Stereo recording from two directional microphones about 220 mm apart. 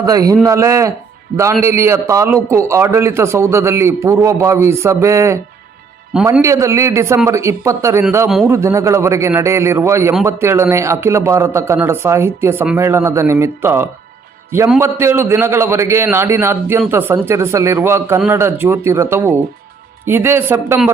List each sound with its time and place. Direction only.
0.0 s a man's voice: 15° right (ahead or behind)
8.3 s a man's voice: centre (ahead or behind)
8.5 s a man's voice: 15° right (ahead or behind)